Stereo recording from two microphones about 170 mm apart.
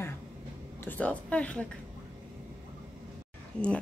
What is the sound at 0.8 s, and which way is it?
Speech, 10° left (ahead or behind).